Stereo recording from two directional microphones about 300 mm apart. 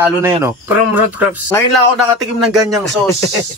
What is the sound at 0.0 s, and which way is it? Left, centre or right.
Speech, centre.